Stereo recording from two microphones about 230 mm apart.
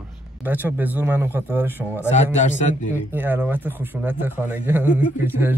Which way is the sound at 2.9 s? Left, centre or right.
Centre.